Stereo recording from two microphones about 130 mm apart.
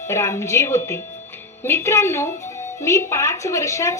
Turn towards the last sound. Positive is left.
turn(degrees=20)  # may be behind; listen again after turning